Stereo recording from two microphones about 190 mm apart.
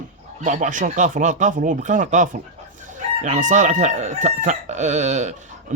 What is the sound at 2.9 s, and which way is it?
Chicken, 40° right (ahead or behind).